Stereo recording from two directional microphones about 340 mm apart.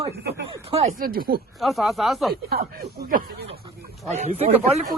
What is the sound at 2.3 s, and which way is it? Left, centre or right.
Speech, right.